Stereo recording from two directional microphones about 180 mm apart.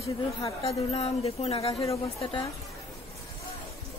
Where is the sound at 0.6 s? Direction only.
35° left (ahead or behind).